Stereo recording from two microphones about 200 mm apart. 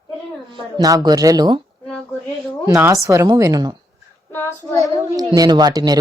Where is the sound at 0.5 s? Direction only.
20° right (ahead or behind).